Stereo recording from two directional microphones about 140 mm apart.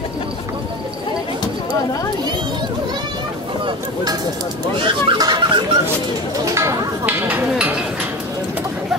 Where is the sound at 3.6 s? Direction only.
30° right (ahead or behind).